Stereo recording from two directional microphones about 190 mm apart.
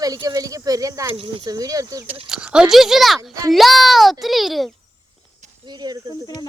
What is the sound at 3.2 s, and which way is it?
Speech, 20° right (ahead or behind).